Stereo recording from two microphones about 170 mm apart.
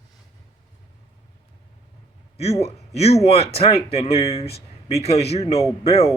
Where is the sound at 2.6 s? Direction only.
35° left (ahead or behind).